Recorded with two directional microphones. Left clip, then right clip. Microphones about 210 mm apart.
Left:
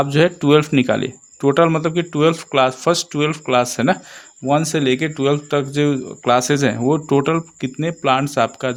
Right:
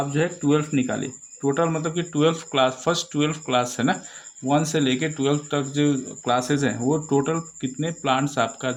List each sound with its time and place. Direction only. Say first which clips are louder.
0.0 s speech: left 8 dB; 50° left (ahead or behind)